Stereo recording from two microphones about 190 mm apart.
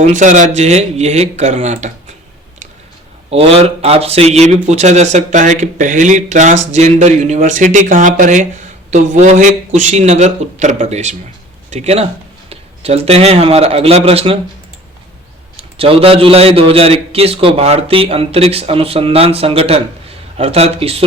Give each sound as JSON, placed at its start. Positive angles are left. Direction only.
{"t": 0.0, "sound": "a man's voice", "side_deg": -40}
{"t": 3.2, "sound": "a man's voice", "side_deg": -30}
{"t": 15.8, "sound": "a man's voice", "side_deg": -30}